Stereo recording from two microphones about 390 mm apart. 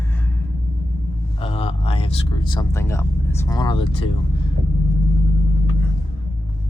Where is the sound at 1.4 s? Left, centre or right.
Centre.